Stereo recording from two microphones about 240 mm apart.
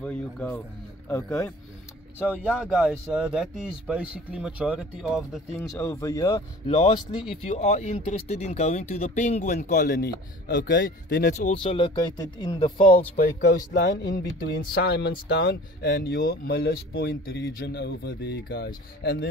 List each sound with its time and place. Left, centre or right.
0.0 s speech: centre
2.2 s speech: centre
5.6 s speech: centre
6.8 s speech: left
11.3 s speech: left
13.1 s speech: left